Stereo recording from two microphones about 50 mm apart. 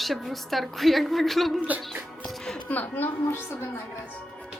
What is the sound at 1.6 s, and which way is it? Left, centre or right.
Speech, right.